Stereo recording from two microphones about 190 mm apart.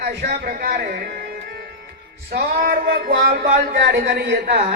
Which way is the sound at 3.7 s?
60° right (ahead or behind).